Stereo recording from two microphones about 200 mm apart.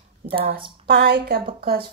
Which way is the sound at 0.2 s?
45° right (ahead or behind).